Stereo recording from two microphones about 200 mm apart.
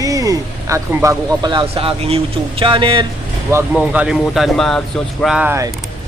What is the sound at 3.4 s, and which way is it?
Speech, 10° right (ahead or behind).